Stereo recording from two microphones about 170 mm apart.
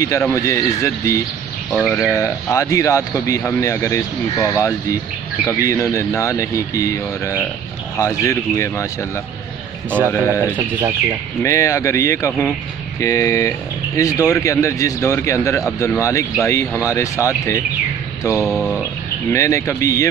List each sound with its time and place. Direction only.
0.3 s speech: 15° left (ahead or behind)
1.7 s speech: 5° left (ahead or behind)
2.0 s speech: 15° left (ahead or behind)
9.8 s a man's voice: 10° right (ahead or behind)
11.4 s speech: 20° left (ahead or behind)
18.4 s speech: 5° left (ahead or behind)
19.3 s speech: 15° left (ahead or behind)